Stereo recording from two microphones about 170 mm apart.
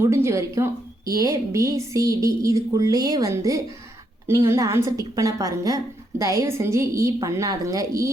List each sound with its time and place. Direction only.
0.0 s a woman's voice: 15° right (ahead or behind)